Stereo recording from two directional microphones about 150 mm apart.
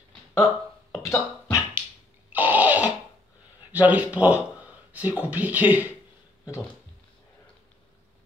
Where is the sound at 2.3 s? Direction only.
10° right (ahead or behind).